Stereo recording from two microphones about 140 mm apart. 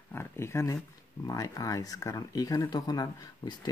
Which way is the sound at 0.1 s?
15° left (ahead or behind).